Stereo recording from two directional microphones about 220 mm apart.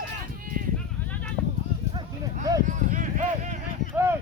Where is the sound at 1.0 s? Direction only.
10° left (ahead or behind).